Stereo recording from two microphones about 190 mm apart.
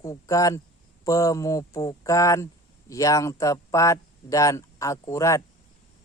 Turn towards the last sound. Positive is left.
turn(degrees=15)  # may be behind; listen again after turning